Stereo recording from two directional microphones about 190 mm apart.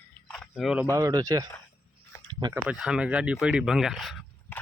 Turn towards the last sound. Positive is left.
turn(degrees=0)  # may be behind; listen again after turning